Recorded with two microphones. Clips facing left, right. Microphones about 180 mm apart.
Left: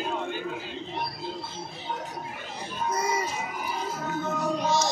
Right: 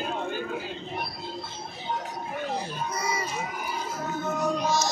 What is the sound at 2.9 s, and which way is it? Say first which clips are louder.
Speech: left 5 dB; 45° left (ahead or behind).